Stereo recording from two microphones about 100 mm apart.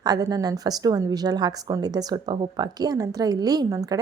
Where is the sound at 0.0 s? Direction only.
40° right (ahead or behind).